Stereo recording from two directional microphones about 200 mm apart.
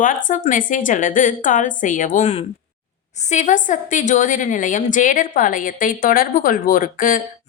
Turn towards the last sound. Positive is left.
turn(degrees=45)  # may be behind; listen again after turning